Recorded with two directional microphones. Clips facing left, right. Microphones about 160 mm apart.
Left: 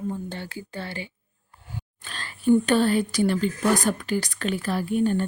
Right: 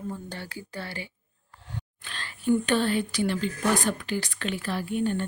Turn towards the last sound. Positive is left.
turn(degrees=45)  # may be behind; listen again after turning